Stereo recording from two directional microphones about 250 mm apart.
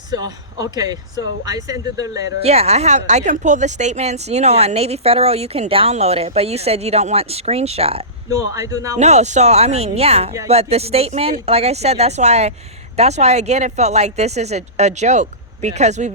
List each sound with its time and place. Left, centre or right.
0.1 s speech: centre
2.5 s speech: right
9.0 s speech: right